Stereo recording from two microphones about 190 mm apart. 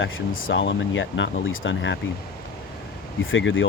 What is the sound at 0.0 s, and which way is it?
Speech, 75° left (ahead or behind).